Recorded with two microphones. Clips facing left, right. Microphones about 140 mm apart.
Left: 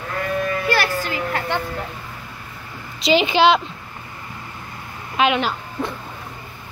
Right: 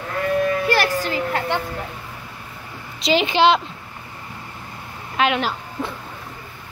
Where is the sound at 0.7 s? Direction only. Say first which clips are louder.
Right 1 dB; 35° right (ahead or behind).